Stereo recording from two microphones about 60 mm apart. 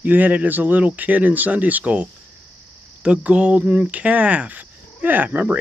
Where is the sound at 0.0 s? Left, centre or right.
Right.